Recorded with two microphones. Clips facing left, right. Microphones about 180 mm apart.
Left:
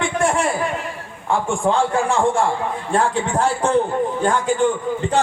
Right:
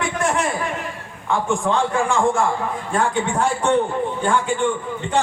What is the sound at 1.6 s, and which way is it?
A man's voice, 35° left (ahead or behind).